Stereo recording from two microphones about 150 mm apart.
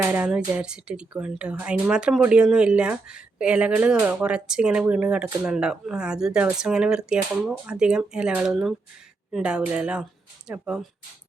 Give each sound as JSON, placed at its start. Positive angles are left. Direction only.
{"t": 0.1, "sound": "speech", "side_deg": -10}